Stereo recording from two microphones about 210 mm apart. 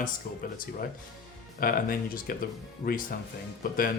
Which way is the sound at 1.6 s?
45° left (ahead or behind).